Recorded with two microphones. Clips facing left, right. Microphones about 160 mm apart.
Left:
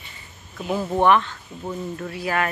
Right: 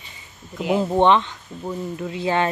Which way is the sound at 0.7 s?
20° right (ahead or behind).